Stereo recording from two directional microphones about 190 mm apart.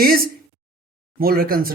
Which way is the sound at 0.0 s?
50° right (ahead or behind).